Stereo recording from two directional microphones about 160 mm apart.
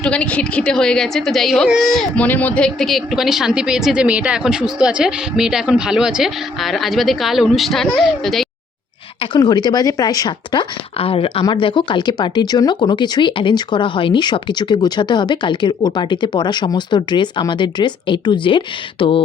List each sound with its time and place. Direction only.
0.0 s a woman's voice: 5° left (ahead or behind)
9.3 s speech: 25° left (ahead or behind)